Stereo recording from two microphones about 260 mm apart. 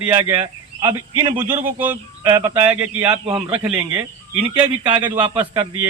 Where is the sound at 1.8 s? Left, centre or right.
Centre.